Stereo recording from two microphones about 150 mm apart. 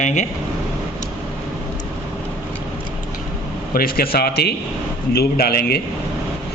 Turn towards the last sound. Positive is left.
turn(degrees=90)